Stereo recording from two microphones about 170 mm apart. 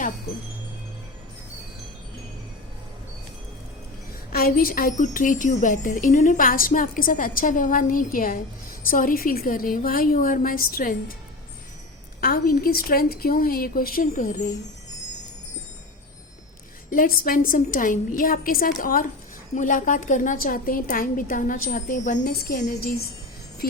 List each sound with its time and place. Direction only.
4.3 s a woman's voice: 60° left (ahead or behind)
12.2 s a woman's voice: 60° left (ahead or behind)
16.9 s a woman's voice: 55° left (ahead or behind)